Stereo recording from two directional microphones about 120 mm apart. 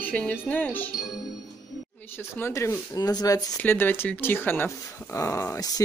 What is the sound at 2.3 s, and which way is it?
Speech, 20° left (ahead or behind).